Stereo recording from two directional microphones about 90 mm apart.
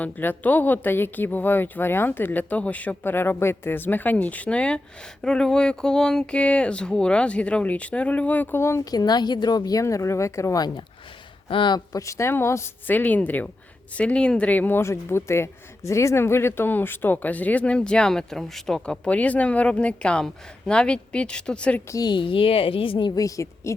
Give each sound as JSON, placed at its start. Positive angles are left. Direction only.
{"t": 0.0, "sound": "a woman's voice", "side_deg": 20}
{"t": 8.8, "sound": "a woman's voice", "side_deg": 45}
{"t": 9.8, "sound": "speech", "side_deg": 35}
{"t": 11.4, "sound": "speech", "side_deg": 65}
{"t": 11.9, "sound": "speech", "side_deg": 35}
{"t": 12.9, "sound": "a woman's voice", "side_deg": 20}
{"t": 21.8, "sound": "speech", "side_deg": 40}
{"t": 22.1, "sound": "speech", "side_deg": 75}
{"t": 23.1, "sound": "speech", "side_deg": 35}